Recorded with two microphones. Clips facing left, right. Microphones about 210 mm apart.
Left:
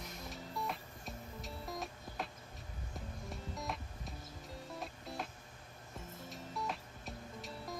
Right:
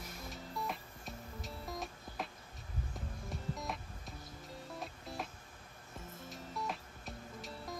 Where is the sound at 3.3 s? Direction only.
Centre (ahead or behind).